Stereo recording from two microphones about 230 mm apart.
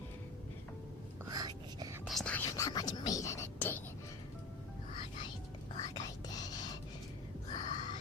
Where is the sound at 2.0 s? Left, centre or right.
Centre.